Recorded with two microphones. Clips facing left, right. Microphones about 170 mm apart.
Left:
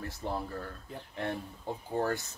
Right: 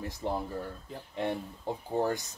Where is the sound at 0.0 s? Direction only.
15° right (ahead or behind).